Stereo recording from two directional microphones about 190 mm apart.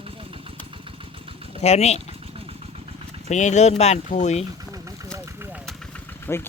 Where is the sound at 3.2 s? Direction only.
40° left (ahead or behind).